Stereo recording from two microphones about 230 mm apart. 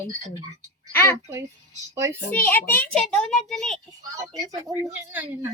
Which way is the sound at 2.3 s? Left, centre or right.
Centre.